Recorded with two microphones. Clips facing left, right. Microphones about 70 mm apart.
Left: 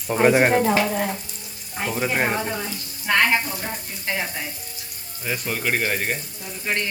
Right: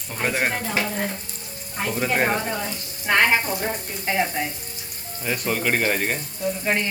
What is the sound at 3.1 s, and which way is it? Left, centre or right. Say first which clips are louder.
Frying: right 1 dB; centre.